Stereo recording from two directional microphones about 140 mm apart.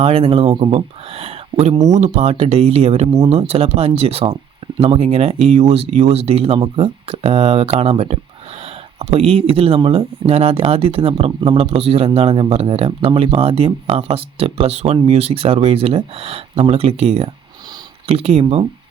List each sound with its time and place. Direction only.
0.0 s speech: 45° right (ahead or behind)